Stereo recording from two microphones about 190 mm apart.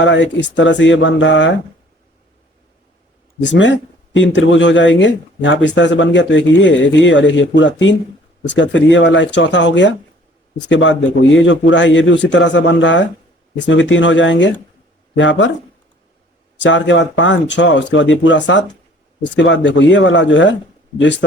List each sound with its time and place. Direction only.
0.0 s speech: 75° left (ahead or behind)
3.4 s speech: 70° left (ahead or behind)
16.6 s speech: 75° left (ahead or behind)